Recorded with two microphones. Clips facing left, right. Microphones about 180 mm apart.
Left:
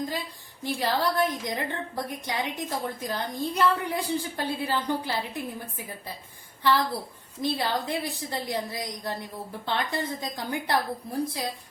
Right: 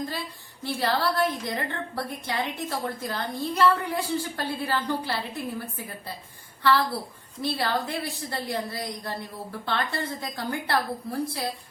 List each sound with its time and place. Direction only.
0.6 s a woman's voice: 15° left (ahead or behind)